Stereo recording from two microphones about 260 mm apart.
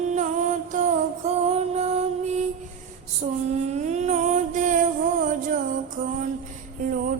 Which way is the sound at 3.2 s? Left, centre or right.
Right.